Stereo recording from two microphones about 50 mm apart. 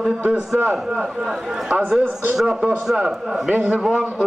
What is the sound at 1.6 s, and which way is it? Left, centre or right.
Speech, right.